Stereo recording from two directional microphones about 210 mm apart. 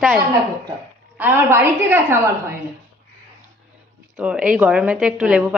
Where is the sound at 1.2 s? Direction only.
10° right (ahead or behind).